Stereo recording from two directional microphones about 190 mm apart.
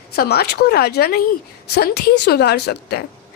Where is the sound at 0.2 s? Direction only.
55° left (ahead or behind).